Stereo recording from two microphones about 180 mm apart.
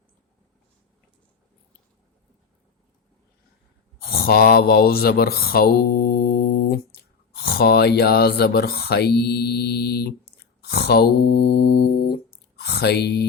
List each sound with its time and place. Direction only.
4.0 s mantra: 60° left (ahead or behind)
7.3 s speech: 60° left (ahead or behind)